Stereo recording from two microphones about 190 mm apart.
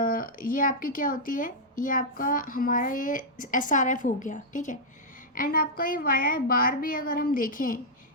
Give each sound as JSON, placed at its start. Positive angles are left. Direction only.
{"t": 0.0, "sound": "speech", "side_deg": 45}